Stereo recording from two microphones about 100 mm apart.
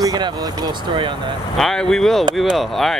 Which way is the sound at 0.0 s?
40° right (ahead or behind).